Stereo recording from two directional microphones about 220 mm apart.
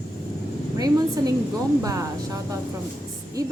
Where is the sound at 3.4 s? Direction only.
15° right (ahead or behind).